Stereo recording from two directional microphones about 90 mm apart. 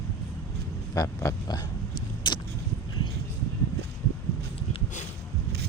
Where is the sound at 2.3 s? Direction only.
60° left (ahead or behind).